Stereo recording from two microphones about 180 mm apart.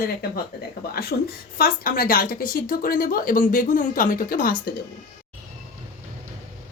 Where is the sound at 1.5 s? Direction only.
55° left (ahead or behind).